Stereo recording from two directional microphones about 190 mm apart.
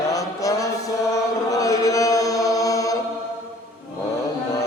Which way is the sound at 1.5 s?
20° left (ahead or behind).